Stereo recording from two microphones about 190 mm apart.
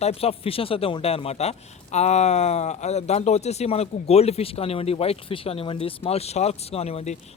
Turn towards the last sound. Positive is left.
turn(degrees=35)  # may be behind; listen again after turning